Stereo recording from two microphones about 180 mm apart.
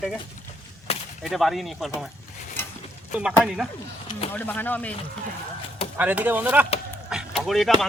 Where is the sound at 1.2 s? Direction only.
Centre (ahead or behind).